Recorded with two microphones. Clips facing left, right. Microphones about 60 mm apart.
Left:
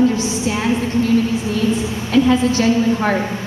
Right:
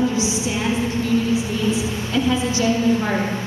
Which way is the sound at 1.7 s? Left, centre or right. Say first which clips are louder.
Left 5 dB; left.